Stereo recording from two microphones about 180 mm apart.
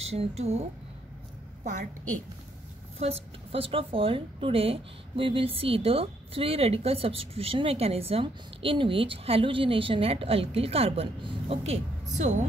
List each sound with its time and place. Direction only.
0.0 s a woman's voice: 35° right (ahead or behind)
3.0 s a woman's voice: 35° right (ahead or behind)